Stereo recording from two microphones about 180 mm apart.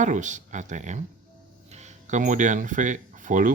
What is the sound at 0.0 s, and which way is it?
Speech, 45° right (ahead or behind).